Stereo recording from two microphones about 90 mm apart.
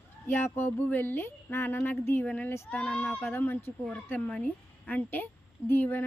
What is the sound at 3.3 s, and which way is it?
Speech, 25° left (ahead or behind).